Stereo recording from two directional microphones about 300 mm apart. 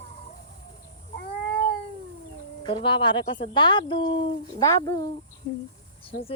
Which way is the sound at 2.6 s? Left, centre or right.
Centre.